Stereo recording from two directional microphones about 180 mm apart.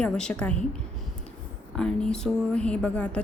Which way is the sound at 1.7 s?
5° left (ahead or behind).